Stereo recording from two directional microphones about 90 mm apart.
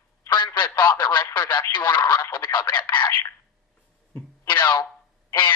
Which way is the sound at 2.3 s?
55° left (ahead or behind).